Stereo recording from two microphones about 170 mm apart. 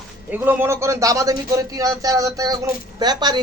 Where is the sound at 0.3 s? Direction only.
10° right (ahead or behind).